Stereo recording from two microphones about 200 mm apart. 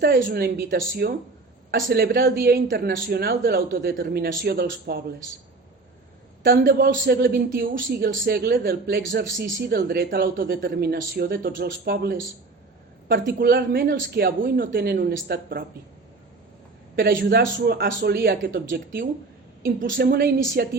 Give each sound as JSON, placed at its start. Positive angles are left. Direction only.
{"t": 0.0, "sound": "speech", "side_deg": -45}
{"t": 6.4, "sound": "speech", "side_deg": -50}
{"t": 16.9, "sound": "speech", "side_deg": -50}
{"t": 19.6, "sound": "speech", "side_deg": -50}